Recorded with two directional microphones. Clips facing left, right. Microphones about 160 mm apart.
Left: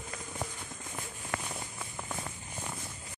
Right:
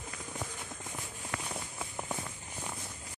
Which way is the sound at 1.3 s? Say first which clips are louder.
Left 3 dB; 50° left (ahead or behind).